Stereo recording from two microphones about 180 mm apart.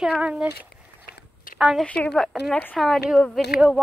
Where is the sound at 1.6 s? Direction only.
Centre (ahead or behind).